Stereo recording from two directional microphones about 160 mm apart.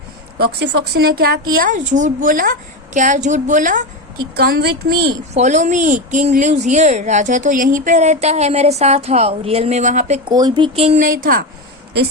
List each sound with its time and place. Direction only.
0.3 s speech: 85° right; by 1.8 s 65° right (ahead or behind)
1.9 s speech: 55° right (ahead or behind)
4.4 s a woman's voice: 80° right
5.3 s speech: 45° right (ahead or behind)
10.2 s speech: 25° right (ahead or behind)
11.0 s a woman's voice: 60° right (ahead or behind)